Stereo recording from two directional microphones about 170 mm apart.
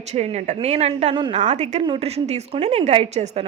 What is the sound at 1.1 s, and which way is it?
Speech, 25° right (ahead or behind).